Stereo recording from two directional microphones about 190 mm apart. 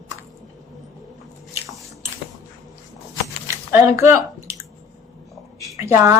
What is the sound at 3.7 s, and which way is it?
Speech, 15° right (ahead or behind).